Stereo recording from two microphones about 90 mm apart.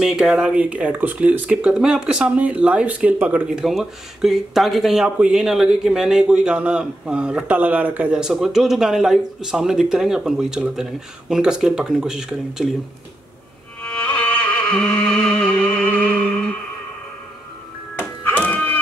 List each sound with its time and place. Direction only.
0.0 s speech: 5° right (ahead or behind)
3.4 s speech: 5° right (ahead or behind)
13.8 s music: 10° left (ahead or behind)
18.2 s music: 15° left (ahead or behind)